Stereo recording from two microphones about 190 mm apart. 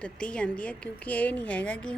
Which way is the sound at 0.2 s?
5° left (ahead or behind).